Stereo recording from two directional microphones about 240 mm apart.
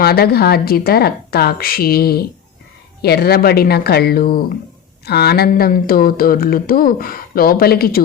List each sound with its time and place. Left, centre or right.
0.0 s speech: left